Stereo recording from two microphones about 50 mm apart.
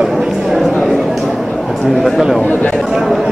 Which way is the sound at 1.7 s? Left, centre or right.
Centre.